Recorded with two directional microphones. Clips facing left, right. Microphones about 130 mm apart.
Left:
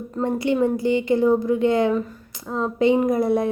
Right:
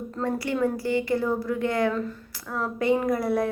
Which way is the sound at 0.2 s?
20° left (ahead or behind).